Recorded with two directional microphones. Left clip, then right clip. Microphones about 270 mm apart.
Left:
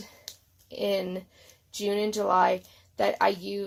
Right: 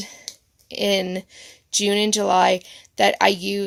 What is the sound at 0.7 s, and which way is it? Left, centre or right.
Speech, right.